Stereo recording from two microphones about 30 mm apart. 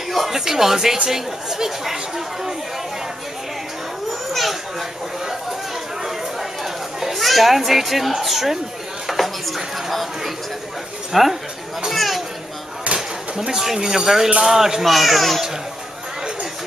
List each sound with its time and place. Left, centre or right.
0.3 s speech: centre
4.3 s a child's voice: centre
6.6 s speech: centre
9.0 s a sound: centre
9.8 s a child's voice: centre
13.5 s speech: centre
14.9 s a child's voice: centre